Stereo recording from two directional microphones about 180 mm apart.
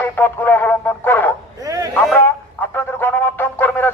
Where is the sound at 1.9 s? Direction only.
10° left (ahead or behind).